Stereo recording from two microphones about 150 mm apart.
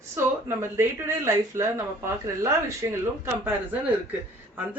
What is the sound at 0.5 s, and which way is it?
A woman's voice, 20° right (ahead or behind).